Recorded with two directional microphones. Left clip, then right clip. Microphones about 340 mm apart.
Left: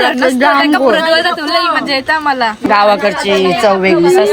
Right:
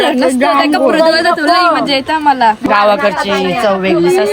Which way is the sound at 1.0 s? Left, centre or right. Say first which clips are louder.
Right 2 dB; centre.